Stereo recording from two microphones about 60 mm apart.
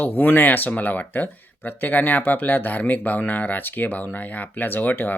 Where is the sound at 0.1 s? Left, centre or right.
Left.